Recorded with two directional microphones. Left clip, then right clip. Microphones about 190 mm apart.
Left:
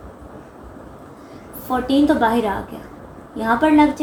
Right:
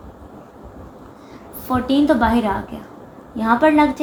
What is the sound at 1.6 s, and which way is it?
A woman's voice, 40° right (ahead or behind).